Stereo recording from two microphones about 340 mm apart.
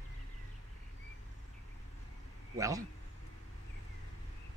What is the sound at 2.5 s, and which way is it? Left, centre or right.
Speech, centre.